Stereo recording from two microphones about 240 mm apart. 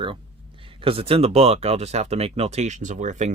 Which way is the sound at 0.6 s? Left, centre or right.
Right.